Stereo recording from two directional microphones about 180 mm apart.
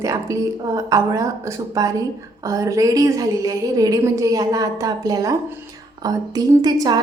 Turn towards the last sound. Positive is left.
turn(degrees=-20)  # may be behind; listen again after turning